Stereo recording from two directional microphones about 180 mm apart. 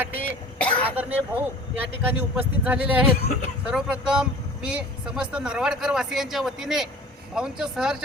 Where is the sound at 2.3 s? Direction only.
10° right (ahead or behind).